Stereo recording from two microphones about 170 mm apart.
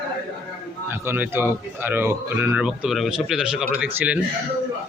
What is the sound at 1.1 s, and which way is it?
A man's voice, 15° right (ahead or behind).